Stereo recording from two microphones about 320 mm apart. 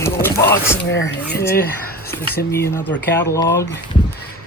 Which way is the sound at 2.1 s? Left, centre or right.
Centre.